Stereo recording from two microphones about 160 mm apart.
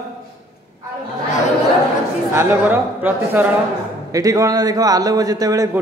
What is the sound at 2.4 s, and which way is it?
A man's voice, 10° right (ahead or behind).